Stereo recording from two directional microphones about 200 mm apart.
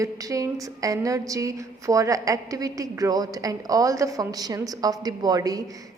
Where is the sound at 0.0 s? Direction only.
15° right (ahead or behind).